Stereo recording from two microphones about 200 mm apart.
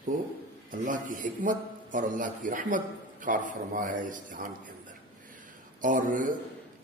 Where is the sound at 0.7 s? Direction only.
40° right (ahead or behind).